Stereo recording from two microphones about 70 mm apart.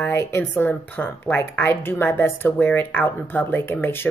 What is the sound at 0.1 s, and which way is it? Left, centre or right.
A woman's voice, left.